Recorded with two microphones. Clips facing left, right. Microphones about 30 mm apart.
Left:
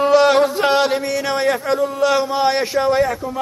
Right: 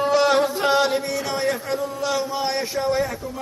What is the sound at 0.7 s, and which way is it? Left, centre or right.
Speech, left.